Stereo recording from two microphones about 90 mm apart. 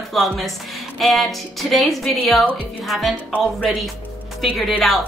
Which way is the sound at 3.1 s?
15° right (ahead or behind).